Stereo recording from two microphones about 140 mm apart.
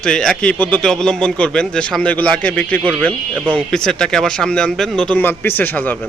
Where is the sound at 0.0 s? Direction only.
5° left (ahead or behind).